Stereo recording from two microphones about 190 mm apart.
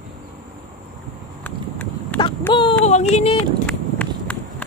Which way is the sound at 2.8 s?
35° left (ahead or behind).